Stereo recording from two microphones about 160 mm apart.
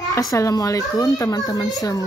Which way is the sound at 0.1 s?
20° left (ahead or behind).